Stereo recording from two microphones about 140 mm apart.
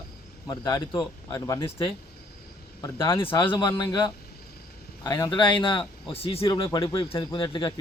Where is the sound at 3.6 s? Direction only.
30° left (ahead or behind).